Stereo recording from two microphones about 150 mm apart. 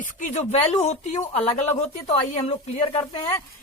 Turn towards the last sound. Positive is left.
turn(degrees=40)  # may be behind; listen again after turning